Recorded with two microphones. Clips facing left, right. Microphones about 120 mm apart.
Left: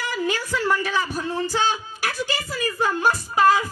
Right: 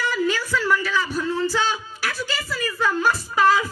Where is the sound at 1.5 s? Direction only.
55° left (ahead or behind).